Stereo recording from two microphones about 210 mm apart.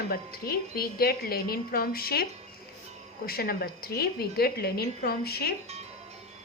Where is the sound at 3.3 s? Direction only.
45° left (ahead or behind).